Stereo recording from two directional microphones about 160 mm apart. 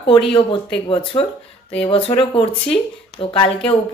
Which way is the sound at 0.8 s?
30° left (ahead or behind).